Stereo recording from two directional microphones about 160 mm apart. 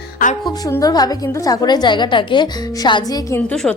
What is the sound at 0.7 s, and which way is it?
A woman's voice, 20° left (ahead or behind).